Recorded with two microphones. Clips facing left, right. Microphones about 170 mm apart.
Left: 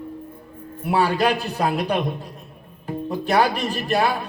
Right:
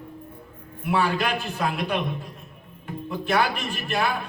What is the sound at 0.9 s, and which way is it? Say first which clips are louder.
Speech: left 4 dB; 35° left (ahead or behind).